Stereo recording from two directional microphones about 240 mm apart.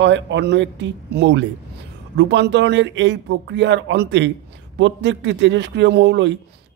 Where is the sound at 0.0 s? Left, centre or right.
Right.